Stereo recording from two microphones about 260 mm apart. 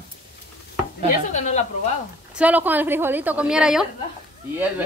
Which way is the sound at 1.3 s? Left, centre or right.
Left.